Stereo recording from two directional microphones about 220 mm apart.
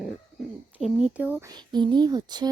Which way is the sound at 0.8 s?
5° right (ahead or behind).